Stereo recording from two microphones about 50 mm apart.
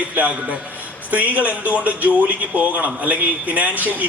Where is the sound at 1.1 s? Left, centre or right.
Right.